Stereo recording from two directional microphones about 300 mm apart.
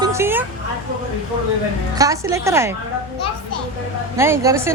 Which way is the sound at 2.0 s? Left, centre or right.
Centre.